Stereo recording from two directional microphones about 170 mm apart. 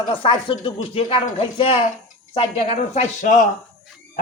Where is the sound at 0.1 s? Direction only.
30° left (ahead or behind).